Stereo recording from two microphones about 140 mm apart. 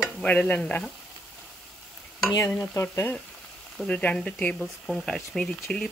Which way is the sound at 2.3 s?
25° left (ahead or behind).